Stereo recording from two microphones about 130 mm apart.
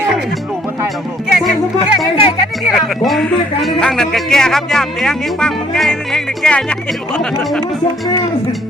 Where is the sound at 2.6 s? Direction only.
Centre (ahead or behind).